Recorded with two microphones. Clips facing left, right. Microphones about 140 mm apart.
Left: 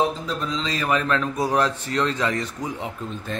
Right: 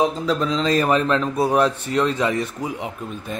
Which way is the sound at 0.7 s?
45° right (ahead or behind).